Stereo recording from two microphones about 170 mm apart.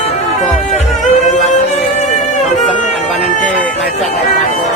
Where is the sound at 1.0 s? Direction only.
45° left (ahead or behind).